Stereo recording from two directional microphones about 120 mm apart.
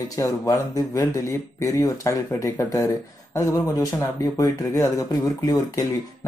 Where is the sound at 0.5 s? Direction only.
25° left (ahead or behind).